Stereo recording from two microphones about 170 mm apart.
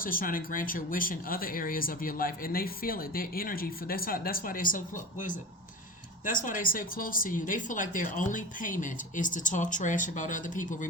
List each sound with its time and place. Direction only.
0.0 s speech: 55° left (ahead or behind)